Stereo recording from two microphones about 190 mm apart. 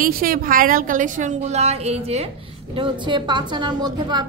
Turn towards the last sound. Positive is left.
turn(degrees=-20)  # may be behind; listen again after turning